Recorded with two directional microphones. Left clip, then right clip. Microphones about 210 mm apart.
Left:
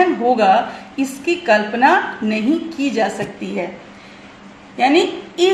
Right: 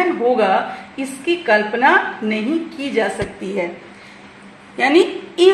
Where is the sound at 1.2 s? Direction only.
10° right (ahead or behind).